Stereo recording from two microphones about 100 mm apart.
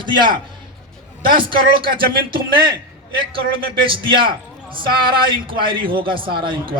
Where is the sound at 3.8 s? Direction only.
60° right (ahead or behind).